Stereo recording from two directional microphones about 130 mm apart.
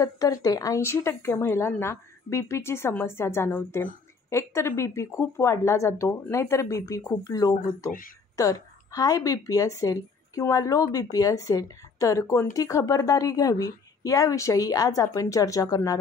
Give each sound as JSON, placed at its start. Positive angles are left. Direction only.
{"t": 0.0, "sound": "a woman's voice", "side_deg": 30}